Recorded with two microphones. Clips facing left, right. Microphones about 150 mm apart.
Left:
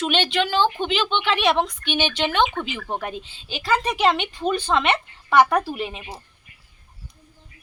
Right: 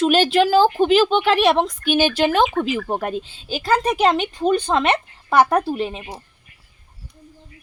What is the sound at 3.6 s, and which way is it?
Speech, 45° right (ahead or behind).